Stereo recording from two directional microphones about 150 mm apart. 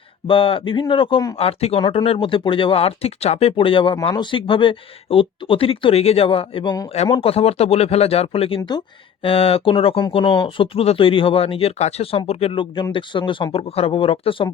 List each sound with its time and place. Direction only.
0.3 s speech: 35° left (ahead or behind)
1.4 s speech: 40° left (ahead or behind)